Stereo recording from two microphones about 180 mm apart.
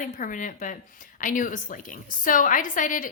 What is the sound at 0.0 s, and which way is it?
A woman's voice, 45° left (ahead or behind).